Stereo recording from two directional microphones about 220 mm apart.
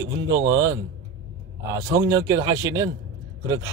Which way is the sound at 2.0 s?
15° right (ahead or behind).